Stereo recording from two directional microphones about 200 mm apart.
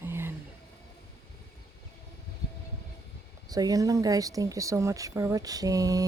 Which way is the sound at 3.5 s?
20° right (ahead or behind).